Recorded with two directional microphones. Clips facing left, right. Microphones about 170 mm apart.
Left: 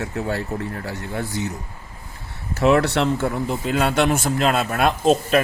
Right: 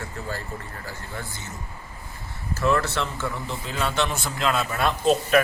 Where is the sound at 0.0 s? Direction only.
70° left (ahead or behind).